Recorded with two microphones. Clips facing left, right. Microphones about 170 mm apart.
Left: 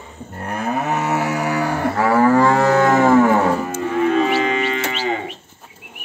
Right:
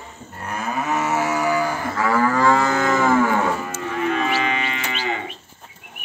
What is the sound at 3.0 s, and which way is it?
Cattle, 35° left (ahead or behind).